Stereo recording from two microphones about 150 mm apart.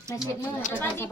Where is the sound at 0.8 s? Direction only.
15° left (ahead or behind).